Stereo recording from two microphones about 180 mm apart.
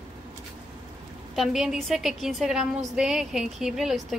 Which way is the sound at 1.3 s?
Centre (ahead or behind).